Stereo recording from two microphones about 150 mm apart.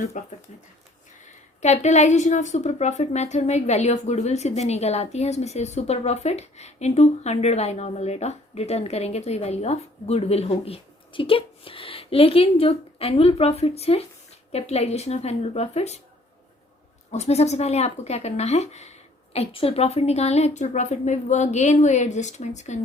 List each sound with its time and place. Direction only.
0.1 s a woman's voice: 55° left (ahead or behind)
17.1 s a woman's voice: 45° left (ahead or behind)